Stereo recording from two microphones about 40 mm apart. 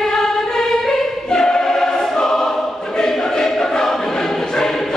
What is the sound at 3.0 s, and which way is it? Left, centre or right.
Choir, centre.